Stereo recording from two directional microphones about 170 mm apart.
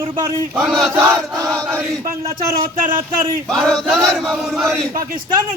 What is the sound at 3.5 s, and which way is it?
Chant, 5° left (ahead or behind).